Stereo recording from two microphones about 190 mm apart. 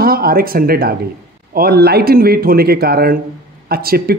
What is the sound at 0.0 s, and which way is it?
A man's voice, 50° right (ahead or behind).